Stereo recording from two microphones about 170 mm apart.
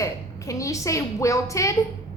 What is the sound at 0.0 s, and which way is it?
A woman's voice, 20° left (ahead or behind).